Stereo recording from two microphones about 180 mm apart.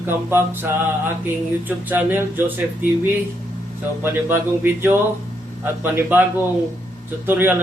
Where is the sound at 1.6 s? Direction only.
10° right (ahead or behind).